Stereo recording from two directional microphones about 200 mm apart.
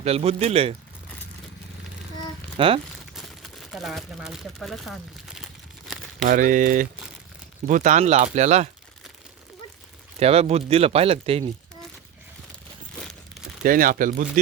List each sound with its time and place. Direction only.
0.0 s speech: 30° right (ahead or behind)
2.6 s speech: 25° right (ahead or behind)
3.2 s speech: centre (ahead or behind)
6.2 s speech: 40° right (ahead or behind)
10.2 s speech: 30° right (ahead or behind)
13.6 s speech: 45° right (ahead or behind)